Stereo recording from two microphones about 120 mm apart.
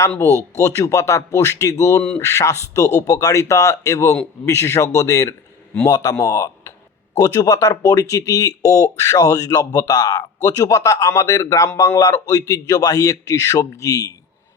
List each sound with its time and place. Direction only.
0.5 s speech: 25° left (ahead or behind)